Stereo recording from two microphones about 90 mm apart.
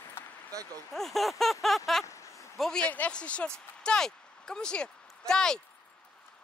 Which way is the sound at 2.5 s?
5° left (ahead or behind).